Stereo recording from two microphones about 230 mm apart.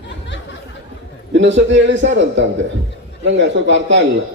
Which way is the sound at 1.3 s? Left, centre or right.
Right.